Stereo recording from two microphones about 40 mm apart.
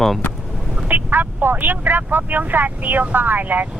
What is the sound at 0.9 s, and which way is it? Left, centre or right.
Speech, right.